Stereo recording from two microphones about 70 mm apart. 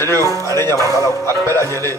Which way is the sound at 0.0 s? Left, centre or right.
Right.